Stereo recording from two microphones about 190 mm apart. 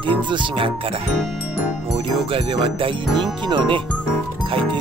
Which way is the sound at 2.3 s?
30° right (ahead or behind).